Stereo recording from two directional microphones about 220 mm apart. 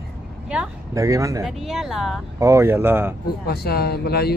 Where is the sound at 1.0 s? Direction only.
15° right (ahead or behind).